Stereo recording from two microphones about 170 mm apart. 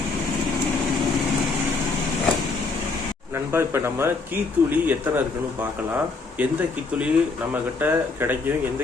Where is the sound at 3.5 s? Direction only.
15° right (ahead or behind).